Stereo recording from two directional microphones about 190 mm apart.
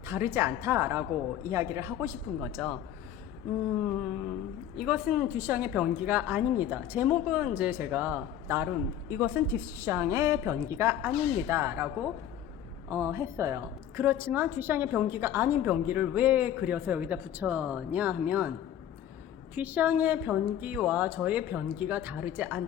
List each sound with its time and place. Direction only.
0.0 s a woman's voice: 15° right (ahead or behind)
4.8 s a woman's voice: 5° right (ahead or behind)
12.9 s a woman's voice: 15° right (ahead or behind)
19.5 s a woman's voice: 10° right (ahead or behind)